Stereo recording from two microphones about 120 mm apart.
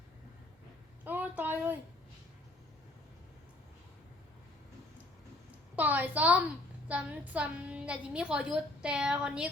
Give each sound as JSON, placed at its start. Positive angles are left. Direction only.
{"t": 1.0, "sound": "speech", "side_deg": -15}
{"t": 5.7, "sound": "a woman's voice", "side_deg": -15}